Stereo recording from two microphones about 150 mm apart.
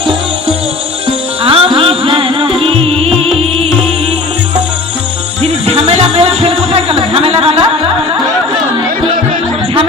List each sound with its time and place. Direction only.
1.5 s music: 35° right (ahead or behind)
5.4 s music: 45° right (ahead or behind)